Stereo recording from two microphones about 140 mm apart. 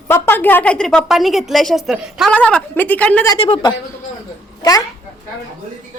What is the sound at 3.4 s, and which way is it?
Speech, 40° left (ahead or behind).